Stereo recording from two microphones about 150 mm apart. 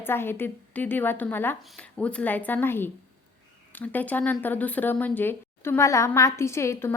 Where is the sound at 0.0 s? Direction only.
15° left (ahead or behind).